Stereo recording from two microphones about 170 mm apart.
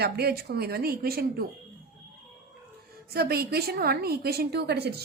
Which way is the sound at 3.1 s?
65° right (ahead or behind).